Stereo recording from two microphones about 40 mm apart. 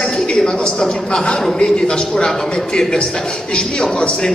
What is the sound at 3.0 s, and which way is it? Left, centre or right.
Music, centre.